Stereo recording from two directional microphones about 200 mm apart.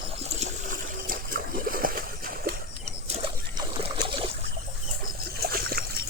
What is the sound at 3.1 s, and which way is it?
Trickle, 30° right (ahead or behind).